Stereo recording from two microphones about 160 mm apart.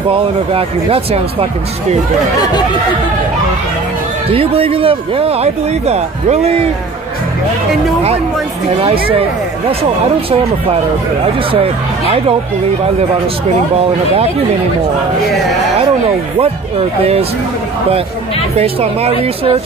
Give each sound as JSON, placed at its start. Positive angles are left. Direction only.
{"t": 0.1, "sound": "speech", "side_deg": -35}
{"t": 4.3, "sound": "speech", "side_deg": -35}
{"t": 18.6, "sound": "speech", "side_deg": -40}